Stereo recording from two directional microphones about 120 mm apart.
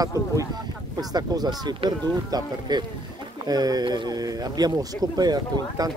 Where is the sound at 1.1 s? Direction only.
35° right (ahead or behind).